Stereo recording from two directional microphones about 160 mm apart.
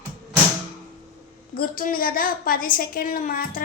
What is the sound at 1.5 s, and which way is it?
A woman's voice, 65° left (ahead or behind).